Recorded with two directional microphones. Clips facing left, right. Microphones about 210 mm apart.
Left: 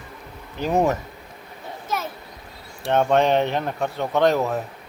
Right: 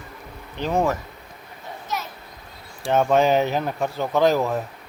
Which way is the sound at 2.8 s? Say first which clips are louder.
Even; centre (ahead or behind).